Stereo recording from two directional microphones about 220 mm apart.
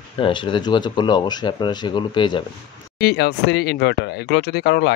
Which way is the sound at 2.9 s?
50° left (ahead or behind).